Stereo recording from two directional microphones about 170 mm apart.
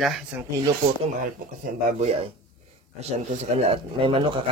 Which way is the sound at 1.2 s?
50° right (ahead or behind).